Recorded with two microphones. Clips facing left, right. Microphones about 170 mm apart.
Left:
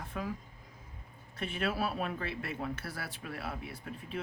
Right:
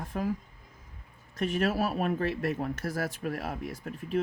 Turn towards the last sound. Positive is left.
turn(degrees=-45)  # may be behind; listen again after turning